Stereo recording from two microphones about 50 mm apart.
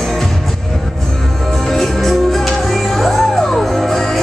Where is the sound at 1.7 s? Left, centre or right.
Centre.